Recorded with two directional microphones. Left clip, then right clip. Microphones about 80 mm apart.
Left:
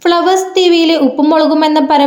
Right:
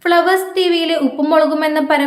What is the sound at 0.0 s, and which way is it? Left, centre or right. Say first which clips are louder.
A woman's voice: left 3 dB; left.